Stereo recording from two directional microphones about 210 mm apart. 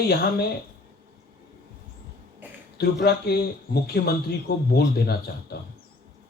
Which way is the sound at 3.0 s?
50° left (ahead or behind).